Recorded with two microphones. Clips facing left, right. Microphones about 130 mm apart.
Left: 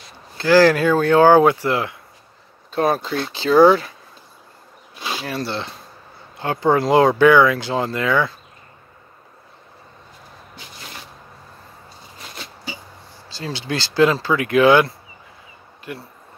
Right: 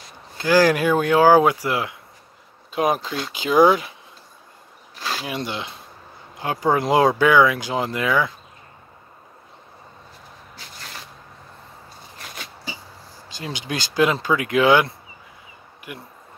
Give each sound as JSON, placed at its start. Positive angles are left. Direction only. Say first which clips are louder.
{"t": 0.4, "sound": "speech", "louder": "left 3 dB", "side_deg": -20}
{"t": 5.2, "sound": "speech", "louder": "left 5 dB", "side_deg": -15}
{"t": 13.3, "sound": "speech", "louder": "left 3 dB", "side_deg": -15}